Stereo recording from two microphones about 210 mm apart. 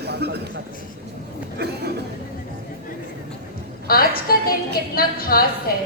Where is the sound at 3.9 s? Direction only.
45° left (ahead or behind).